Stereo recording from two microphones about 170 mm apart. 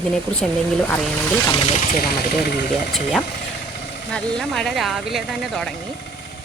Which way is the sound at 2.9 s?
Centre (ahead or behind).